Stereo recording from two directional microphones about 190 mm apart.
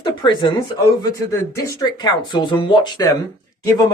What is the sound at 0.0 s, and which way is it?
Speech, 25° left (ahead or behind).